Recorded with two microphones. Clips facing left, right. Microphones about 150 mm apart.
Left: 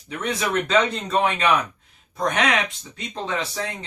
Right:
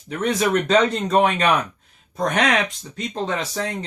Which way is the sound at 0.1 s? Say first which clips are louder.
Right 5 dB; 40° right (ahead or behind).